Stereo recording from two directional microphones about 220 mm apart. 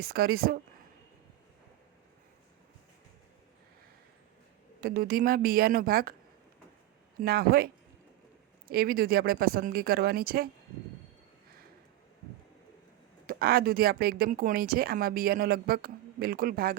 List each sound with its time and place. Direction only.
0.0 s speech: 45° right (ahead or behind)
4.8 s speech: 45° right (ahead or behind)
7.2 s speech: 45° right (ahead or behind)
13.2 s speech: 45° right (ahead or behind)